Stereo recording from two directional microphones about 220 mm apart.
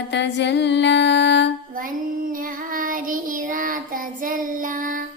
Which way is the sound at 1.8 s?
40° right (ahead or behind).